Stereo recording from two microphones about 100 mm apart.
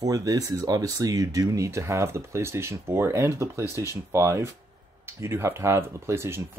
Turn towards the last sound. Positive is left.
turn(degrees=-25)  # may be behind; listen again after turning